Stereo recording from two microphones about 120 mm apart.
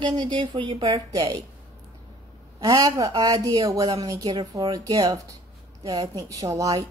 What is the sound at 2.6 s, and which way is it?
A woman's voice, 30° right (ahead or behind).